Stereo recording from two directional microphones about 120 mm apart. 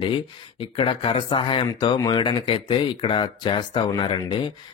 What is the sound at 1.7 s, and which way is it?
Speech, 30° left (ahead or behind).